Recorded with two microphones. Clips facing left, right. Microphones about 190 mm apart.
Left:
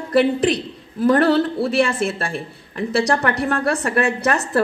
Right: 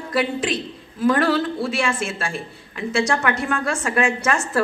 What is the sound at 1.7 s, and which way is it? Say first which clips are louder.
A woman's voice: left 5 dB; 35° left (ahead or behind).